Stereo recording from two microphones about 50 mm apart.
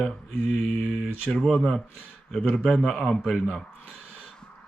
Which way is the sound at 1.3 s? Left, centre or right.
Centre.